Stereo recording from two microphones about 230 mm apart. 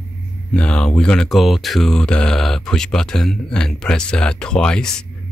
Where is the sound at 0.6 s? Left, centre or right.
Centre.